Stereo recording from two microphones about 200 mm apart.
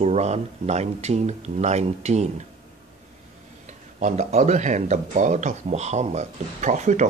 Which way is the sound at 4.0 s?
35° right (ahead or behind).